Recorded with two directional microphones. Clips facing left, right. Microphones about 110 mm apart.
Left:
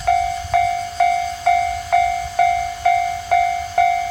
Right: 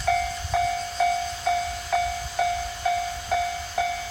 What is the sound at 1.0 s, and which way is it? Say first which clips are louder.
Train: left 7 dB; 60° left (ahead or behind).